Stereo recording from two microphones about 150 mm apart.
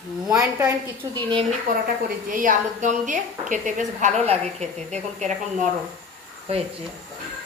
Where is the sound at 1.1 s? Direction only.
35° right (ahead or behind).